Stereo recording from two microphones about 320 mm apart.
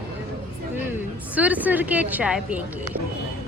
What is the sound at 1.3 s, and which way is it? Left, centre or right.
Speech, centre.